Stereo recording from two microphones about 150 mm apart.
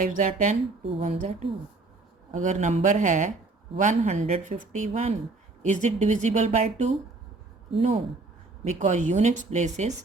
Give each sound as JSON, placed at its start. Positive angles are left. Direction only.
{"t": 0.0, "sound": "a woman's voice", "side_deg": -55}
{"t": 7.7, "sound": "speech", "side_deg": -40}
{"t": 8.6, "sound": "speech", "side_deg": -55}